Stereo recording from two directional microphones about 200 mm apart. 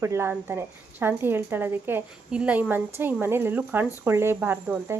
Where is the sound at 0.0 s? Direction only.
15° right (ahead or behind).